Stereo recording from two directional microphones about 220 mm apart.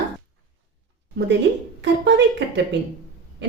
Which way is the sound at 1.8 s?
50° right (ahead or behind).